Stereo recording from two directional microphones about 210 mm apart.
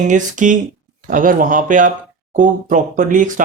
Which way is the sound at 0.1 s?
35° right (ahead or behind).